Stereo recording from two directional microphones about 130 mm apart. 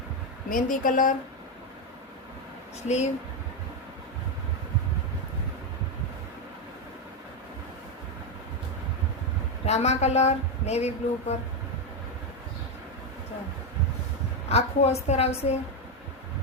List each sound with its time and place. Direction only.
0.5 s speech: 90° left
2.8 s speech: 60° left (ahead or behind)
9.6 s speech: 55° left (ahead or behind)
14.5 s speech: 55° left (ahead or behind)